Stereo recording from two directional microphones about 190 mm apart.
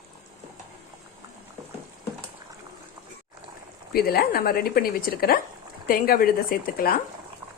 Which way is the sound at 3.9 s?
55° left (ahead or behind).